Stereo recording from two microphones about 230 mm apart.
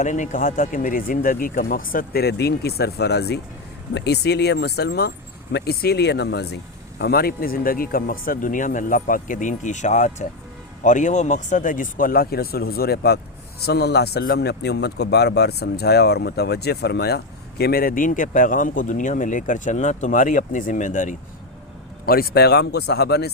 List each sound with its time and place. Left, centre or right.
0.0 s speech: left